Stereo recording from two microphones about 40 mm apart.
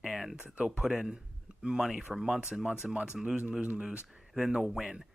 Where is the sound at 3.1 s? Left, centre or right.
Right.